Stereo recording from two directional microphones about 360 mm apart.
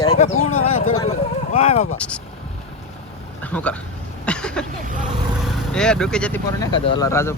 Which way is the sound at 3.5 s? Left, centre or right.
Centre.